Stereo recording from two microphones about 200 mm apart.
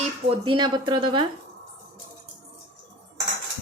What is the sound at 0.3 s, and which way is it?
Speech, 25° right (ahead or behind).